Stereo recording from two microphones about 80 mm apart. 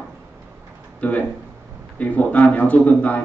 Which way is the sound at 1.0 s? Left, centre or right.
Centre.